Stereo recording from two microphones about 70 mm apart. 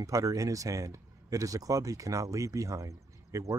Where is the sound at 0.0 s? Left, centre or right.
Right.